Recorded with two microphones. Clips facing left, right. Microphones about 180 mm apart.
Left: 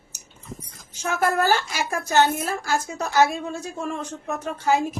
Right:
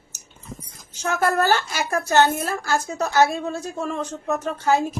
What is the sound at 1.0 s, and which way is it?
Speech, 10° left (ahead or behind).